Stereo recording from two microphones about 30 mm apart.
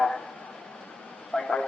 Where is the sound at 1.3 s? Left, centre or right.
Left.